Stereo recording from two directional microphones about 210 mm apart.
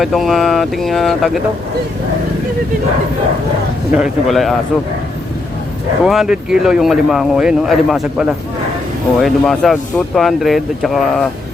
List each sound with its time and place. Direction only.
0.0 s speech: centre (ahead or behind)
3.9 s speech: centre (ahead or behind)
6.1 s speech: 5° right (ahead or behind)